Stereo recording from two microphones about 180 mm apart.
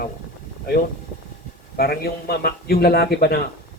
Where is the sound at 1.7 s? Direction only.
60° left (ahead or behind).